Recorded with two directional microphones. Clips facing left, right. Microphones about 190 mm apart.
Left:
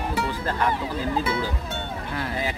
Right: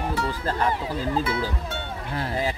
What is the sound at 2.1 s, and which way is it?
Speech, 35° right (ahead or behind).